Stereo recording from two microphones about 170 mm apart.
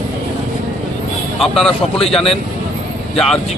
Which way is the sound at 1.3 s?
Centre (ahead or behind).